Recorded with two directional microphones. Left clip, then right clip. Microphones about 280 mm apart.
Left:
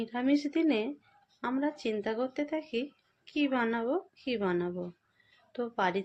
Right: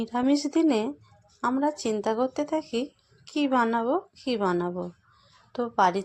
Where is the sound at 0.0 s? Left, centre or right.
Centre.